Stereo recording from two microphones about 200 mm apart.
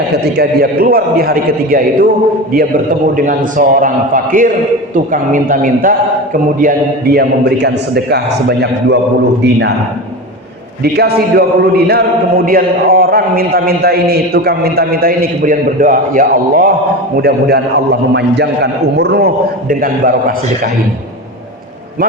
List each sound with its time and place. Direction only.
0.3 s a man's voice: 50° right (ahead or behind)
3.2 s a man's voice: 40° right (ahead or behind)
10.9 s a man's voice: 50° right (ahead or behind)